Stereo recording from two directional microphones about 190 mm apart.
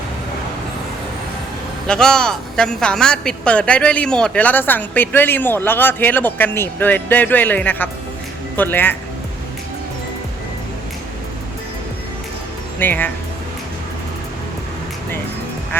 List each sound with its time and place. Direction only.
1.9 s a woman's voice: 5° left (ahead or behind)
12.8 s a woman's voice: 10° left (ahead or behind)